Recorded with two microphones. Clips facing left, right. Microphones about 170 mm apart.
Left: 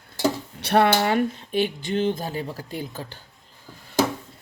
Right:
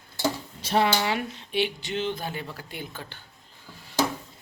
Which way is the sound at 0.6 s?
65° left (ahead or behind).